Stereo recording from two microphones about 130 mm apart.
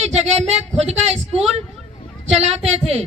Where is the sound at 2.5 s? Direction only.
50° right (ahead or behind).